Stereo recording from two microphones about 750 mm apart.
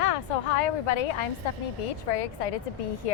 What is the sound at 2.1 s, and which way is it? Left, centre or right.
Speech, left.